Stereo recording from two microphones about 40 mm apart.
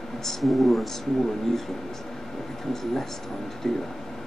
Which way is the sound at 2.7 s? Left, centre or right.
Centre.